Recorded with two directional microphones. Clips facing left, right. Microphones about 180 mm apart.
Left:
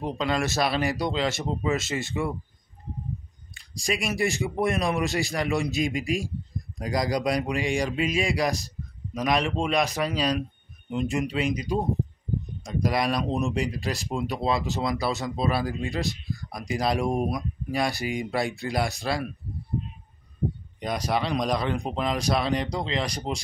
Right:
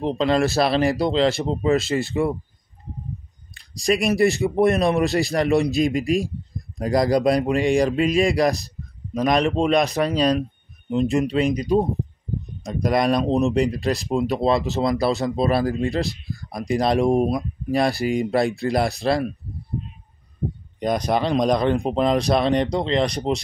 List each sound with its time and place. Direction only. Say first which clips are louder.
0.0 s speech: right 7 dB; 30° right (ahead or behind)
3.7 s speech: right 8 dB; 35° right (ahead or behind)
21.0 s speech: right 4 dB; 30° right (ahead or behind)